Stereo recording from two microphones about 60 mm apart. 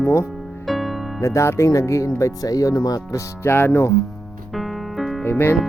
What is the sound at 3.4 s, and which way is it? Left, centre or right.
Music, left.